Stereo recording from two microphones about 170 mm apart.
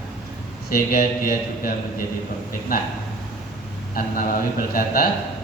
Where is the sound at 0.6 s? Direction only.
60° left (ahead or behind).